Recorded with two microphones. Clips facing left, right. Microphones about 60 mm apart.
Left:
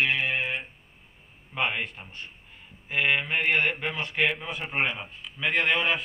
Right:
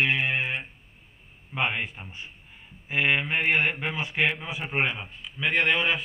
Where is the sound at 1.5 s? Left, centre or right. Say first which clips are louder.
Right 1 dB; centre.